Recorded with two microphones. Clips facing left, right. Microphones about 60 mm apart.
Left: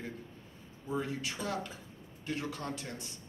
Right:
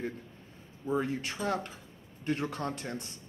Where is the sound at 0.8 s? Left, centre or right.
Right.